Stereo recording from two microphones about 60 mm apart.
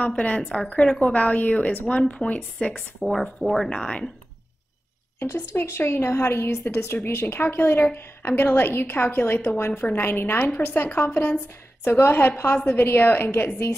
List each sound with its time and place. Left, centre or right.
0.0 s a woman's voice: left
0.4 s speech: centre
0.9 s a woman's voice: left
3.0 s speech: centre
3.4 s speech: centre
5.2 s a woman's voice: left